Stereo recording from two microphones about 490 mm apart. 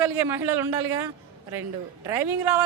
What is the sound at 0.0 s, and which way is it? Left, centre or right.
Speech, right.